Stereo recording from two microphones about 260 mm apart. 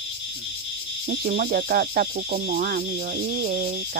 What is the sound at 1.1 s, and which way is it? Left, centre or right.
Speech, right.